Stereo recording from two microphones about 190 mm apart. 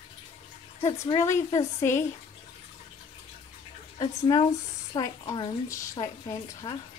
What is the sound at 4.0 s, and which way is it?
Speech, 20° left (ahead or behind).